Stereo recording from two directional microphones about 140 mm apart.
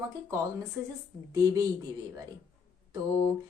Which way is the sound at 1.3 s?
25° right (ahead or behind).